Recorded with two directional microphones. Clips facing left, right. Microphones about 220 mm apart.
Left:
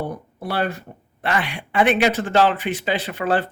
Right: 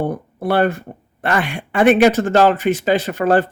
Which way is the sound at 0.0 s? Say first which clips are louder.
Right 7 dB; 55° right (ahead or behind).